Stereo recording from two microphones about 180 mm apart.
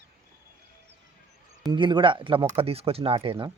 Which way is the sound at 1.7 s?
25° right (ahead or behind).